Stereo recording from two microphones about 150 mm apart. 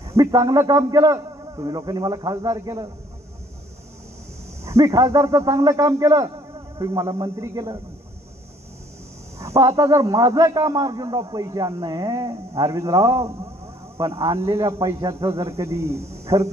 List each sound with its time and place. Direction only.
0.0 s a man's voice: 20° right (ahead or behind)
4.6 s a man's voice: 20° right (ahead or behind)
9.4 s a man's voice: 20° right (ahead or behind)